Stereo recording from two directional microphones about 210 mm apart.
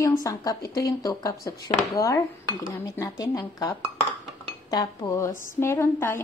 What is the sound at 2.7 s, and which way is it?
A woman's voice, 15° left (ahead or behind).